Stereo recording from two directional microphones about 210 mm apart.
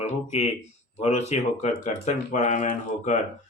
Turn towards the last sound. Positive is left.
turn(degrees=35)  # may be behind; listen again after turning